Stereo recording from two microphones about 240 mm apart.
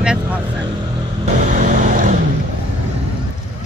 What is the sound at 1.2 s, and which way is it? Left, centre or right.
Vehicle, right.